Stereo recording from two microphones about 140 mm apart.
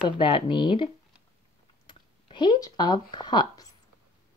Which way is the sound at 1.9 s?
35° left (ahead or behind).